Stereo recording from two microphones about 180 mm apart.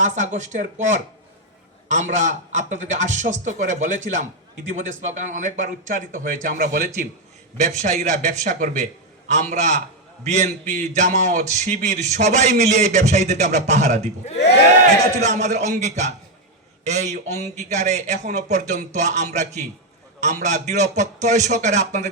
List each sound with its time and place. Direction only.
0.0 s a man's voice: 40° right (ahead or behind)
15.2 s speech: 40° right (ahead or behind)